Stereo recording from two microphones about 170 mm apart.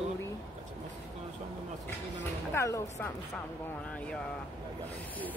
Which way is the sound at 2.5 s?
20° left (ahead or behind).